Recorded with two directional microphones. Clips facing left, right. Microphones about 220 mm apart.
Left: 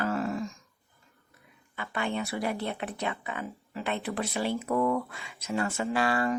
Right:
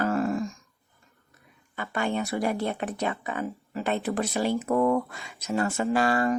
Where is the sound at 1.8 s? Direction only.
45° right (ahead or behind).